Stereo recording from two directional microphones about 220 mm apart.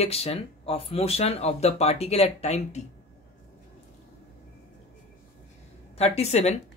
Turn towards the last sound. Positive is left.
turn(degrees=30)  # may be behind; listen again after turning